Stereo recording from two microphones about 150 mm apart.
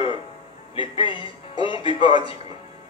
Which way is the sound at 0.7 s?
35° left (ahead or behind).